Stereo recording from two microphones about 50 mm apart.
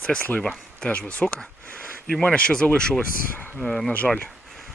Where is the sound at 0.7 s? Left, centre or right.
Centre.